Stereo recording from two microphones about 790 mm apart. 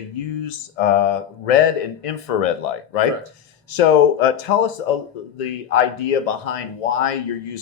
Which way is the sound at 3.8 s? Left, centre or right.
Left.